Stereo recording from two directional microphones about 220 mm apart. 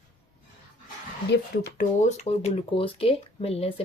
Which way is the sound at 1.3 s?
50° left (ahead or behind).